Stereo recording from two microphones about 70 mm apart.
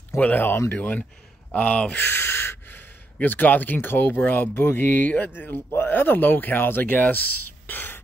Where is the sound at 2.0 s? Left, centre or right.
Left.